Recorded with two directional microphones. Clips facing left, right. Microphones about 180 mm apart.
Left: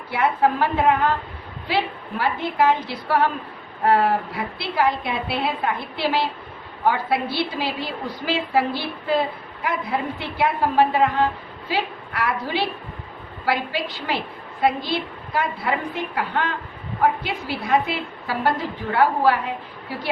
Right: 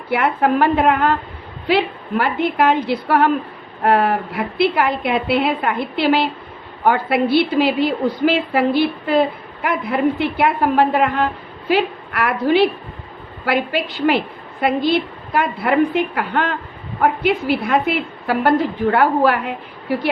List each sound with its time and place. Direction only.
0.1 s a woman's voice: 65° right (ahead or behind)
14.8 s a woman's voice: 60° right (ahead or behind)